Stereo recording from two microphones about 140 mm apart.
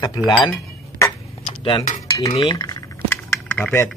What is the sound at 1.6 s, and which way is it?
Speech, 35° left (ahead or behind).